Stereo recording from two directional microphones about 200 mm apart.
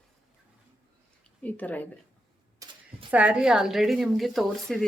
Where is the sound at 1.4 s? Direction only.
5° left (ahead or behind).